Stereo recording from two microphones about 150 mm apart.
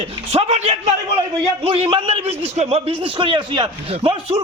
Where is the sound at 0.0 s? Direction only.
45° right (ahead or behind).